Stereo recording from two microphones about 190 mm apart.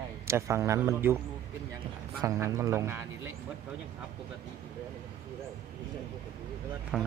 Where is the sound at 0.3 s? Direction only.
15° right (ahead or behind).